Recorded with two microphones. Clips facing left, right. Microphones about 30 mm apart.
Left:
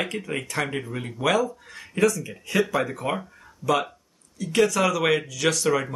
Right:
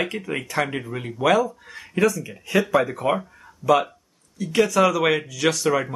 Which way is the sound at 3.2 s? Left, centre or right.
Centre.